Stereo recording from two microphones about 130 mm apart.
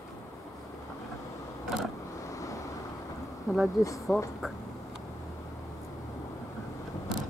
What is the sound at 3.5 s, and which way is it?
Speech, centre (ahead or behind).